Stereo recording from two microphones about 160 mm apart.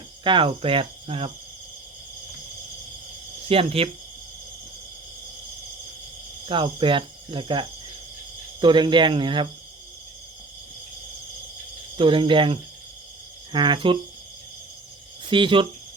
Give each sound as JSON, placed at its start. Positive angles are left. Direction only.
{"t": 0.3, "sound": "cricket", "side_deg": -30}
{"t": 3.5, "sound": "cricket", "side_deg": -35}
{"t": 6.4, "sound": "speech", "side_deg": -30}
{"t": 11.9, "sound": "cricket", "side_deg": -30}
{"t": 13.5, "sound": "speech", "side_deg": -30}
{"t": 15.3, "sound": "cricket", "side_deg": -30}